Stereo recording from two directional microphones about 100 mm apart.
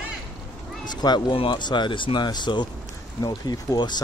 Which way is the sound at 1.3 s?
55° left (ahead or behind).